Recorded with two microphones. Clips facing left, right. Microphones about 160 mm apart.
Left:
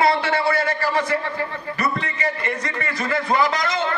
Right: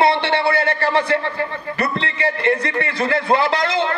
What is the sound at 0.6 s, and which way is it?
Speech, 65° right (ahead or behind).